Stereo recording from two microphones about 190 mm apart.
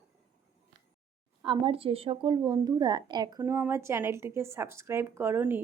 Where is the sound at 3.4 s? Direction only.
10° right (ahead or behind).